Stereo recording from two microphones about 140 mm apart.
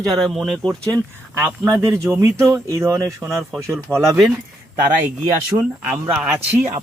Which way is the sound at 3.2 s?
Centre (ahead or behind).